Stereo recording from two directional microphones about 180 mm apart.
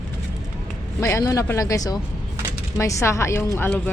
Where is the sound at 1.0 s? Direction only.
15° left (ahead or behind).